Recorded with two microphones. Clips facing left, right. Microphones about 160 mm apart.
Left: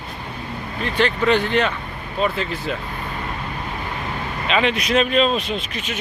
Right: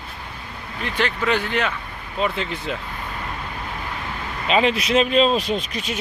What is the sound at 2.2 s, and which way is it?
Speech, 20° right (ahead or behind).